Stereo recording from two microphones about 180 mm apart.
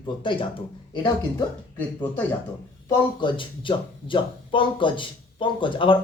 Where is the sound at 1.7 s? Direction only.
10° left (ahead or behind).